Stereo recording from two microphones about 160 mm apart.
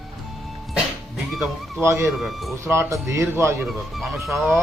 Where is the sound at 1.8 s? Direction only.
15° right (ahead or behind).